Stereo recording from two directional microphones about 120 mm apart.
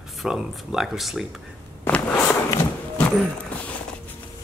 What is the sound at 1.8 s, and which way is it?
Walk, 20° left (ahead or behind).